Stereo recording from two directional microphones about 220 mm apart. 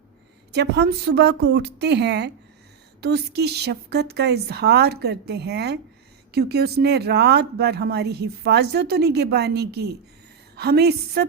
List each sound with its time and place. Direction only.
0.5 s speech: 50° right (ahead or behind)